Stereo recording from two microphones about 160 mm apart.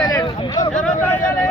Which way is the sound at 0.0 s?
25° left (ahead or behind).